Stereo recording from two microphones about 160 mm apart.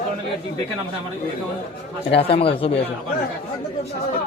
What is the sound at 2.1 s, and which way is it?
Speech, 35° left (ahead or behind).